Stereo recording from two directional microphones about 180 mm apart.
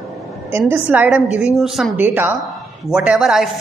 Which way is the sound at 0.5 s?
10° right (ahead or behind).